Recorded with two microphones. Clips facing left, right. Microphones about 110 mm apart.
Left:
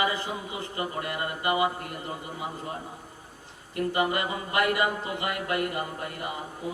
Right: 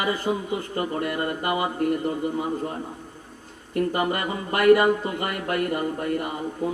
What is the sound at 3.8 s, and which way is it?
Music, 45° right (ahead or behind).